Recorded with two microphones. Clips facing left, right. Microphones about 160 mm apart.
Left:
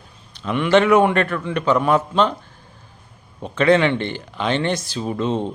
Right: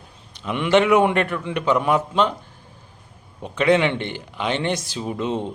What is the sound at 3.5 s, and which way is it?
Speech, 15° right (ahead or behind).